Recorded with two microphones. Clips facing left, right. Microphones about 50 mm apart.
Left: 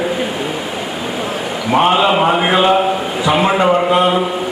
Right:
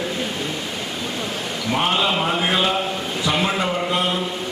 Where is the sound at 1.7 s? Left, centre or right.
Left.